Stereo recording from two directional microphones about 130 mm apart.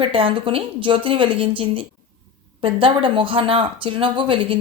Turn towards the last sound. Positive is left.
turn(degrees=-40)  # may be behind; listen again after turning